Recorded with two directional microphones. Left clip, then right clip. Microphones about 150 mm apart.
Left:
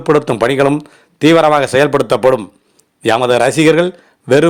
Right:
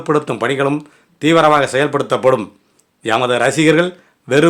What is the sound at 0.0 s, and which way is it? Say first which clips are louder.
A man's voice: left 5 dB; 40° left (ahead or behind).